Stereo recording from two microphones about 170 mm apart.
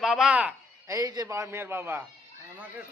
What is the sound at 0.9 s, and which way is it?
A man's voice, 20° right (ahead or behind).